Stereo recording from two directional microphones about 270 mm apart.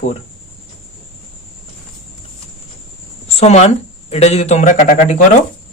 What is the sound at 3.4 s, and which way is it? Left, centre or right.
Speech, left.